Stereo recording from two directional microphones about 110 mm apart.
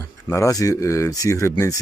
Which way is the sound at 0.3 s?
30° left (ahead or behind).